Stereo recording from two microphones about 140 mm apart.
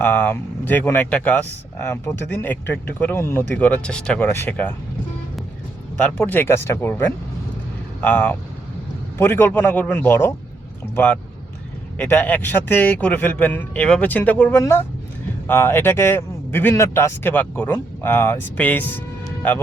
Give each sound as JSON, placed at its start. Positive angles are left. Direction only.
{"t": 0.0, "sound": "speech", "side_deg": 10}
{"t": 6.0, "sound": "speech", "side_deg": 10}